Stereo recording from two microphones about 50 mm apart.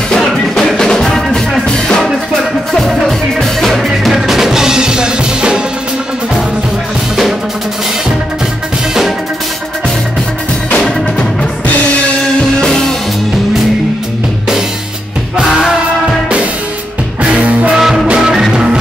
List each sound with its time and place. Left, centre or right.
0.1 s music: centre
2.7 s music: centre
12.2 s music: centre
17.2 s music: right
17.7 s music: centre